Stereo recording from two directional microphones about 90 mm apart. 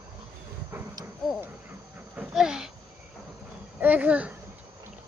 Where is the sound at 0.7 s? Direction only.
25° right (ahead or behind).